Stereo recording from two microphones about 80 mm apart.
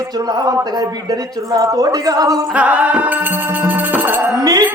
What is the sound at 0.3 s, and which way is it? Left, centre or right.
A man's voice, right.